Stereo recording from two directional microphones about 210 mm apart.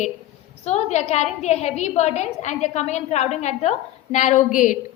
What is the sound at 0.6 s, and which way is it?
A woman's voice, 30° left (ahead or behind).